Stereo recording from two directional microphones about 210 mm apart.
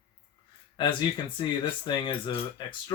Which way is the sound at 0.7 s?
20° left (ahead or behind).